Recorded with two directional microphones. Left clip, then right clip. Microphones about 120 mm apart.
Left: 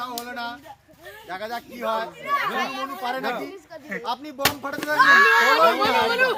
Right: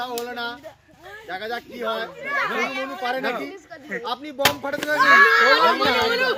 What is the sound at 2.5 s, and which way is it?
Speech, 25° left (ahead or behind).